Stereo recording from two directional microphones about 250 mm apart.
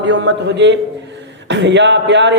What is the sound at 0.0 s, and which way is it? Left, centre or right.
A man's voice, right.